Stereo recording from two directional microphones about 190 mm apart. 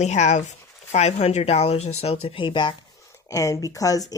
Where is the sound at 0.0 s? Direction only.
40° left (ahead or behind).